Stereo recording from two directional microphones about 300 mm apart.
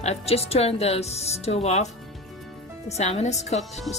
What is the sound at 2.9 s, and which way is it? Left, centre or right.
Speech, left.